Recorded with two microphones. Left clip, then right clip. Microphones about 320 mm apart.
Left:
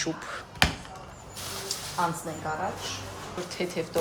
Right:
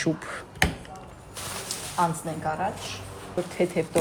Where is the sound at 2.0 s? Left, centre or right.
Right.